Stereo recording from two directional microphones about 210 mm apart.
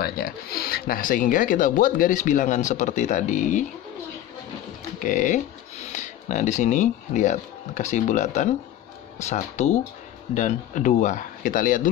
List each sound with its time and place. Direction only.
0.0 s speech: 45° left (ahead or behind)
5.0 s speech: 35° left (ahead or behind)